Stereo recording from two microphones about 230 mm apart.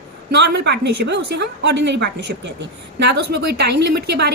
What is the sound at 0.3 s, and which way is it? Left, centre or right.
A woman's voice, right.